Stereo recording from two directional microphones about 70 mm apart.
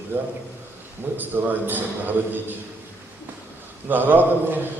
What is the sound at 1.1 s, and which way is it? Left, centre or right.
A man's voice, right.